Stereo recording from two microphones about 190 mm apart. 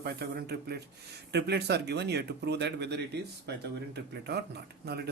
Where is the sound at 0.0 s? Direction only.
55° right (ahead or behind).